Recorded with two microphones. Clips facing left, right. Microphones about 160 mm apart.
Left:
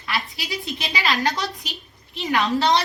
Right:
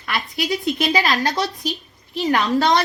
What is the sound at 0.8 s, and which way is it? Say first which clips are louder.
Speech: right 3 dB; 45° right (ahead or behind).